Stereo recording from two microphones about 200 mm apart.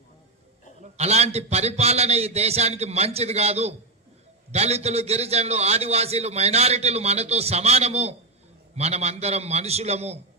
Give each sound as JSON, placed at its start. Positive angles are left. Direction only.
{"t": 0.8, "sound": "a man's voice", "side_deg": -35}